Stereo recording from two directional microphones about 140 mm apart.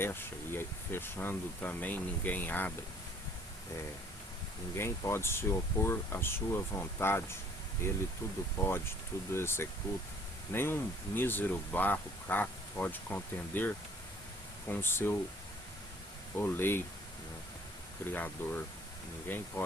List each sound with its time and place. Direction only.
0.0 s speech: 15° left (ahead or behind)
4.7 s speech: 20° left (ahead or behind)
14.7 s speech: 15° left (ahead or behind)
16.4 s speech: 15° left (ahead or behind)
18.0 s speech: 15° left (ahead or behind)